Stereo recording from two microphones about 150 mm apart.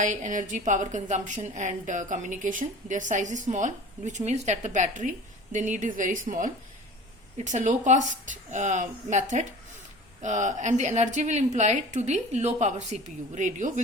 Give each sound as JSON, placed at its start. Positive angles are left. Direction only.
{"t": 0.0, "sound": "a woman's voice", "side_deg": -55}